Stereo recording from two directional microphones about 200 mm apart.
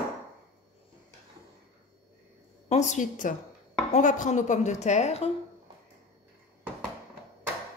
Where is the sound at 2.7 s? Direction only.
35° left (ahead or behind).